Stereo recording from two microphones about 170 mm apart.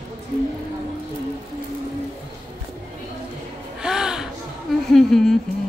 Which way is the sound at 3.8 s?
5° right (ahead or behind).